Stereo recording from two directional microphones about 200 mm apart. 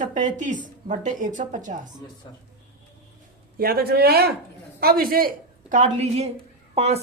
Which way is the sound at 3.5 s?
50° right (ahead or behind).